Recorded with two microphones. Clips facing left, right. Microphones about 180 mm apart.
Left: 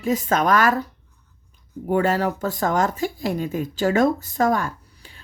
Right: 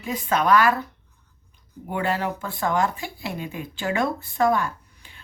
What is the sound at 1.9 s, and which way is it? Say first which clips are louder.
Speech: left 5 dB; 45° left (ahead or behind).